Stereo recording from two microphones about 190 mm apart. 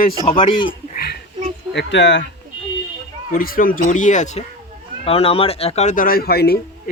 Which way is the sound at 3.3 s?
50° left (ahead or behind).